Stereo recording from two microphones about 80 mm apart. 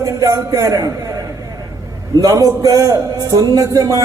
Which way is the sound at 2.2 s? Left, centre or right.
Right.